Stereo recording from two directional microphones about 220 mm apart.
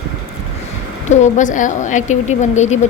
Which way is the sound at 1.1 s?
35° left (ahead or behind).